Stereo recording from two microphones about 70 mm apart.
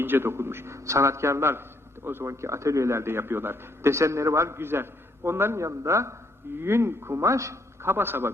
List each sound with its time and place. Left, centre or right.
0.0 s a man's voice: right